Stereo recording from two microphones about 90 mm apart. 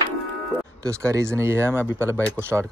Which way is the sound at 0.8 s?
35° right (ahead or behind).